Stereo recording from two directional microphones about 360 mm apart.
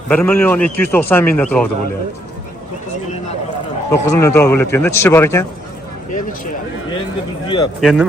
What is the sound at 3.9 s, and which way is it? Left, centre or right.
A man's voice, centre.